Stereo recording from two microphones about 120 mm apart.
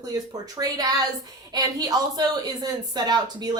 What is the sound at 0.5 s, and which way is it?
A woman's voice, 30° right (ahead or behind).